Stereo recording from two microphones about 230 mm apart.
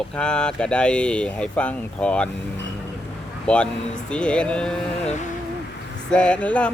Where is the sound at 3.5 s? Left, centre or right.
Centre.